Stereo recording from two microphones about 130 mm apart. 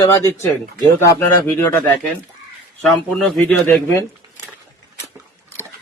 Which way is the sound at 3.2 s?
Centre (ahead or behind).